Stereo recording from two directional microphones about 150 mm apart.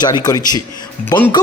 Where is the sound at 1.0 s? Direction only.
10° left (ahead or behind).